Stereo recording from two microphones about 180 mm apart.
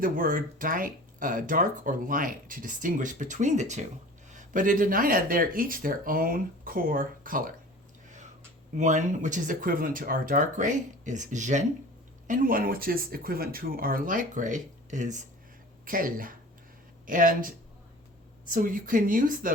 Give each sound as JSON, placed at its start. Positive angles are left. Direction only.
{"t": 0.0, "sound": "speech", "side_deg": -50}
{"t": 8.0, "sound": "a sound", "side_deg": -45}
{"t": 8.7, "sound": "speech", "side_deg": -45}